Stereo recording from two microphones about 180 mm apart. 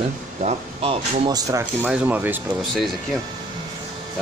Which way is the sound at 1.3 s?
10° right (ahead or behind).